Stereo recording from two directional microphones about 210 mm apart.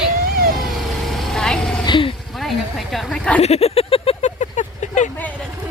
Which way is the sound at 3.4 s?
30° left (ahead or behind).